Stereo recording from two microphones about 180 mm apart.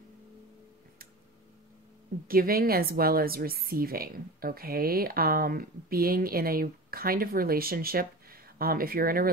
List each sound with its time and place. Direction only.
2.2 s a woman's voice: 55° right (ahead or behind)